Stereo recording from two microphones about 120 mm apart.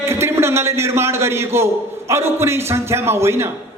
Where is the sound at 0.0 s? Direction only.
20° right (ahead or behind).